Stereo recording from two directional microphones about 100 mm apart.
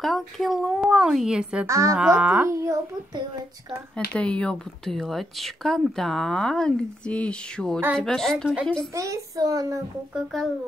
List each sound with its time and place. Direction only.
0.0 s a woman's voice: centre (ahead or behind)
1.7 s a child's voice: 30° right (ahead or behind)
2.1 s a woman's voice: 15° right (ahead or behind)
2.4 s a child's voice: 30° right (ahead or behind)
3.9 s speech: 10° left (ahead or behind)
8.9 s a child's voice: 35° right (ahead or behind)
10.3 s speech: 5° left (ahead or behind)